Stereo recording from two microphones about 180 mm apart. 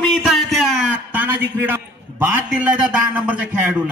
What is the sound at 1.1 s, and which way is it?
A man's voice, 10° right (ahead or behind).